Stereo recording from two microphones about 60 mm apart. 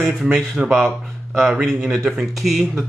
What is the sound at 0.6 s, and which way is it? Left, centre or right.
Speech, centre.